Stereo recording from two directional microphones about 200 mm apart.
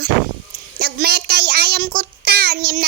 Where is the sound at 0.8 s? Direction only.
50° right (ahead or behind).